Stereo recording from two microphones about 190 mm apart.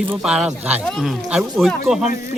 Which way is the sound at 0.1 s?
5° right (ahead or behind).